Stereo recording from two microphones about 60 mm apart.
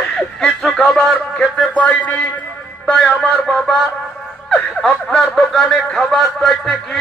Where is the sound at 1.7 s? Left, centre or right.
Left.